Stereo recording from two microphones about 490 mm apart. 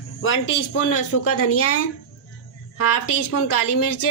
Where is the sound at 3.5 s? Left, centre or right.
Left.